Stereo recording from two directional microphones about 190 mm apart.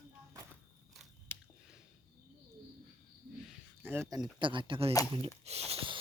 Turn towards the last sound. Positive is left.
turn(degrees=-30)  # may be behind; listen again after turning